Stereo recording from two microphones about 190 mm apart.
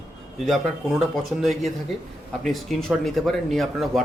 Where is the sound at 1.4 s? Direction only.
Centre (ahead or behind).